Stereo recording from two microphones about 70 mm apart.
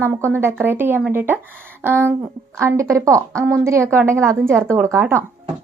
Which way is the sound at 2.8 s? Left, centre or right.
Right.